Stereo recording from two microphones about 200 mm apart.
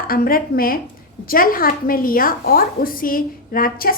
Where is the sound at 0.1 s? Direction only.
45° left (ahead or behind).